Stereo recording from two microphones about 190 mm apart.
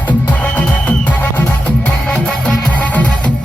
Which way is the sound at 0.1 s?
10° left (ahead or behind).